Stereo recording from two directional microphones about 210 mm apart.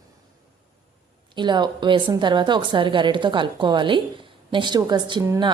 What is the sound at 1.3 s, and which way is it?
A woman's voice, 20° right (ahead or behind).